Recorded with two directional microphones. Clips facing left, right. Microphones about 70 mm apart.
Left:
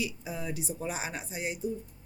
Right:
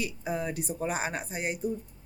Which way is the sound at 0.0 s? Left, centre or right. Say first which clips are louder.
Right 4 dB; right.